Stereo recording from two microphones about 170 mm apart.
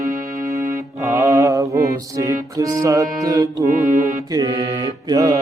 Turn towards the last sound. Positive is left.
turn(degrees=-20)  # may be behind; listen again after turning